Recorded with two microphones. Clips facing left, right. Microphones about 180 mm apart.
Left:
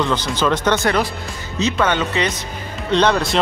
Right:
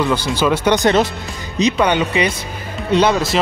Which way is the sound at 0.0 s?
10° right (ahead or behind).